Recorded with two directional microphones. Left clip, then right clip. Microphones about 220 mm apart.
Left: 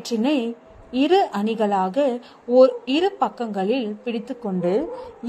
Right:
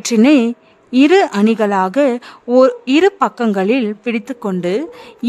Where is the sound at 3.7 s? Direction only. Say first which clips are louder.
Right 7 dB; 65° right (ahead or behind).